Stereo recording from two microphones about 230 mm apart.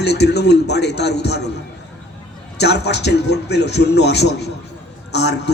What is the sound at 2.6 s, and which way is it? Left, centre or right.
A man's voice, left.